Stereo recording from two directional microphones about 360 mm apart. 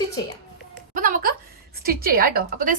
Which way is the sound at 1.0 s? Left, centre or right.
Right.